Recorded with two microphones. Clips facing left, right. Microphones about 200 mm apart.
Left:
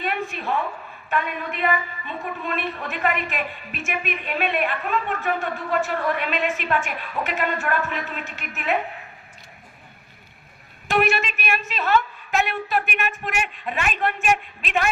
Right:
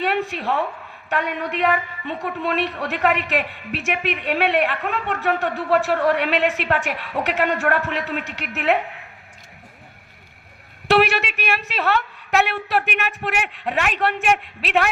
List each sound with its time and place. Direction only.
0.0 s a sound: 75° right (ahead or behind)
1.1 s a woman's voice: 75° right (ahead or behind)
10.8 s a woman's voice: 70° right (ahead or behind)